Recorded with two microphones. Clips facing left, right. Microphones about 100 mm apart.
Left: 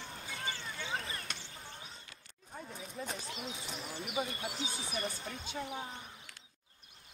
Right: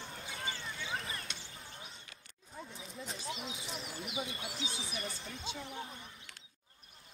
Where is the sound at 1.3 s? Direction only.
50° left (ahead or behind).